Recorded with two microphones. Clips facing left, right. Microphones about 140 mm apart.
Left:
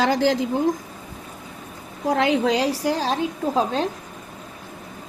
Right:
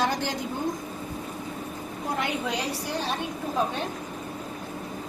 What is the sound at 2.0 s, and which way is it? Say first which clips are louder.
A woman's voice: left 10 dB; 90° left.